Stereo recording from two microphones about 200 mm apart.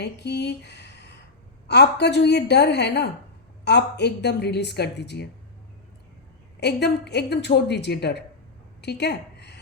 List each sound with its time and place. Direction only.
0.0 s a woman's voice: 55° left (ahead or behind)
6.6 s a woman's voice: 55° left (ahead or behind)
8.8 s a sound: 55° left (ahead or behind)